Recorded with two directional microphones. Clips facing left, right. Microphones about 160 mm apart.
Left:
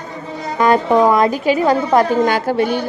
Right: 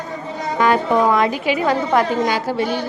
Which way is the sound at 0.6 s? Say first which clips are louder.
Left 3 dB; 40° left (ahead or behind).